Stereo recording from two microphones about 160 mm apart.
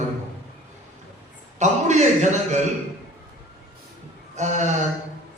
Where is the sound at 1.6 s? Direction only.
45° right (ahead or behind).